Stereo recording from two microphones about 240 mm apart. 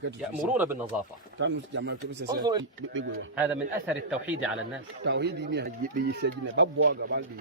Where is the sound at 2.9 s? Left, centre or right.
Right.